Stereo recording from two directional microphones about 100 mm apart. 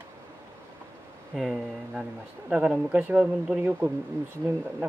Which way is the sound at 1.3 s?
Centre (ahead or behind).